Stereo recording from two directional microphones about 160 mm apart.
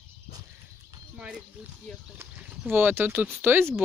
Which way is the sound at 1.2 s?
5° right (ahead or behind).